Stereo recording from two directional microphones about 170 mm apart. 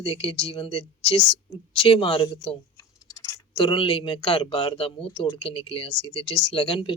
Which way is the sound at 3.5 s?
30° left (ahead or behind).